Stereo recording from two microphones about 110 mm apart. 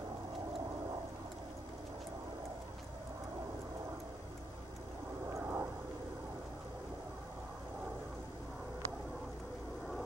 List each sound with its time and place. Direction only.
5.3 s vehicle: 25° right (ahead or behind)